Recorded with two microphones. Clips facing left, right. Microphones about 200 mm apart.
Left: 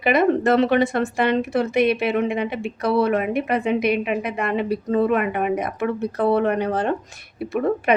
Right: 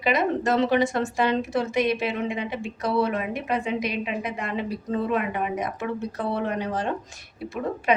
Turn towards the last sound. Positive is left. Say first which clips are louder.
# left 5 dB
turn(degrees=60)  # may be behind; listen again after turning